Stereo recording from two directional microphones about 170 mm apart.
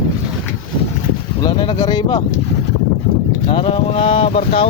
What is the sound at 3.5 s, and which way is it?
Speech, 30° left (ahead or behind).